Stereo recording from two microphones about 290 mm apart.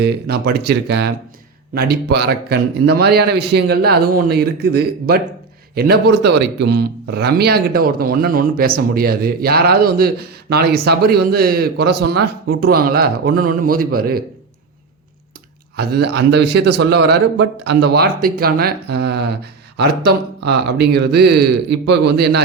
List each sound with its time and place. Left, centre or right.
0.0 s a man's voice: right
15.7 s a man's voice: right